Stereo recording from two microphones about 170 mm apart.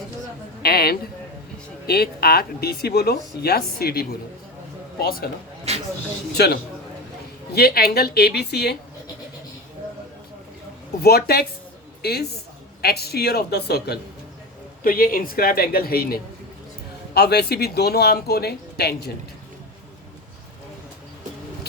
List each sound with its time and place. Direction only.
0.6 s a man's voice: 65° left (ahead or behind)
5.7 s a sound: 40° right (ahead or behind)
6.3 s speech: 70° left (ahead or behind)
11.0 s speech: 65° left (ahead or behind)
14.8 s speech: 55° left (ahead or behind)
17.2 s speech: 70° left (ahead or behind)